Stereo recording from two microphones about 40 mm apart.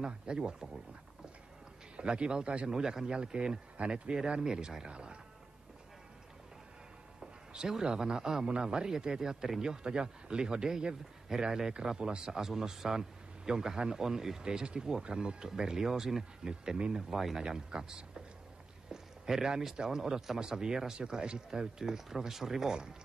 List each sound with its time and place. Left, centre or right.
0.0 s speech: right
2.0 s speech: right
4.1 s speech: centre
7.5 s a man's voice: centre